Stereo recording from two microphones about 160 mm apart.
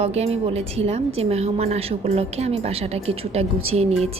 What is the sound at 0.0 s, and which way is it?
Speech, 40° right (ahead or behind).